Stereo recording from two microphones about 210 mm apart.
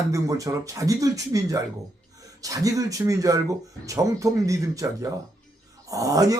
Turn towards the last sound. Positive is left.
turn(degrees=-15)  # may be behind; listen again after turning